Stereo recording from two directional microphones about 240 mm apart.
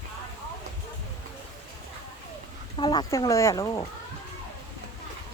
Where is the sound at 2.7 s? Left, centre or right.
Centre.